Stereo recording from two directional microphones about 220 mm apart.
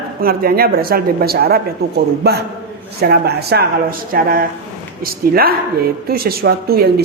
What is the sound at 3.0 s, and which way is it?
Speech, 45° right (ahead or behind).